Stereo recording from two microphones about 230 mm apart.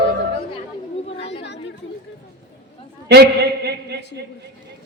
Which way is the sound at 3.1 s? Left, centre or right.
Right.